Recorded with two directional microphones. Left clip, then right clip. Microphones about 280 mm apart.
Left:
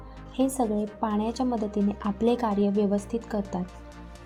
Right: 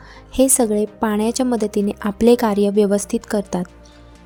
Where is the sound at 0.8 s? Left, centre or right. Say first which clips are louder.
Right 9 dB; right.